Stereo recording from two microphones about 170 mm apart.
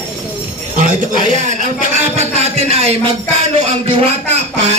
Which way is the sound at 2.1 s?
40° right (ahead or behind).